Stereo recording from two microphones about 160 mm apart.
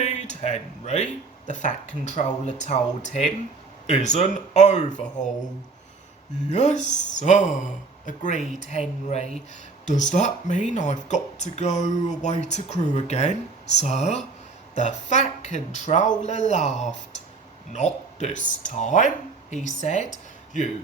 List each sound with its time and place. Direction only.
0.0 s speech: 45° left (ahead or behind)
6.5 s speech: 45° left (ahead or behind)